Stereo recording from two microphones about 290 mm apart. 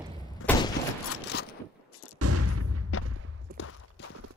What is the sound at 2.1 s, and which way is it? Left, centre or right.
Artillery fire, right.